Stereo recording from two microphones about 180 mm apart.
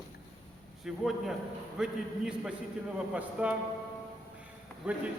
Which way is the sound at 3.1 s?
5° right (ahead or behind).